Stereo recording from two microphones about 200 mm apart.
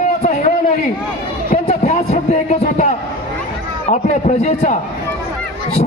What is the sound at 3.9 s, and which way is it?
Speech, 35° left (ahead or behind).